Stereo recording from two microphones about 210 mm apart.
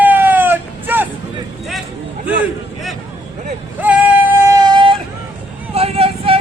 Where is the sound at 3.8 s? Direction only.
5° right (ahead or behind).